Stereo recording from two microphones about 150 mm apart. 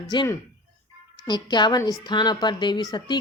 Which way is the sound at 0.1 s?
30° left (ahead or behind).